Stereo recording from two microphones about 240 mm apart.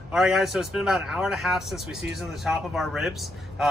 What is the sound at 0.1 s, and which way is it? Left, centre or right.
Speech, centre.